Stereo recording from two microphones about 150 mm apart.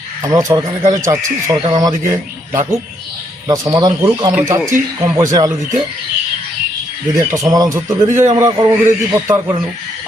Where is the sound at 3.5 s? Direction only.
25° right (ahead or behind).